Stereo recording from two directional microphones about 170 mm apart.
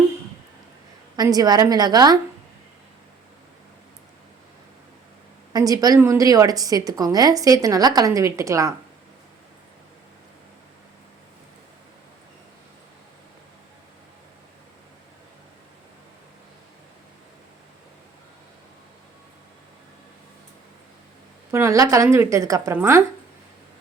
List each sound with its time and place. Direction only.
1.1 s a woman's voice: 20° right (ahead or behind)
5.5 s a woman's voice: 20° right (ahead or behind)
21.5 s a woman's voice: 15° right (ahead or behind)